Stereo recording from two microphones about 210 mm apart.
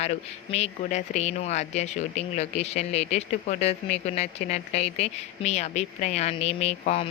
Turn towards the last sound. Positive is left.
turn(degrees=30)  # may be behind; listen again after turning